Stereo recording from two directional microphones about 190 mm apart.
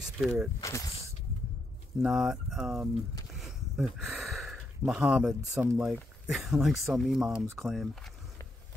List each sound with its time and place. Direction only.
0.0 s speech: centre (ahead or behind)
0.6 s speech: 15° left (ahead or behind)
2.0 s speech: 5° right (ahead or behind)
3.3 s a sound: centre (ahead or behind)
5.8 s speech: 5° right (ahead or behind)